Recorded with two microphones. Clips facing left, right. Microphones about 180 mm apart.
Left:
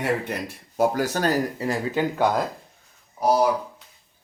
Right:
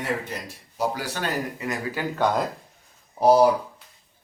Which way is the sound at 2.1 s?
10° left (ahead or behind).